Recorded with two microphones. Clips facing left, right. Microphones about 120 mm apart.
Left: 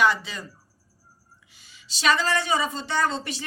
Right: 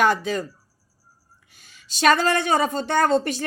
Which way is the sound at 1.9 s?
50° right (ahead or behind).